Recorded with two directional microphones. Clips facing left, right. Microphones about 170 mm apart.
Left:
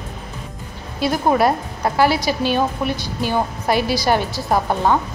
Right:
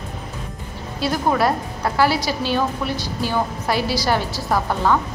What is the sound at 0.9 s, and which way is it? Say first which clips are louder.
A woman's voice: left 3 dB; 20° left (ahead or behind).